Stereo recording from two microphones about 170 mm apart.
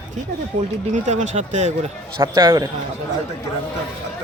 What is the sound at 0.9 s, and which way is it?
Speech, 45° right (ahead or behind).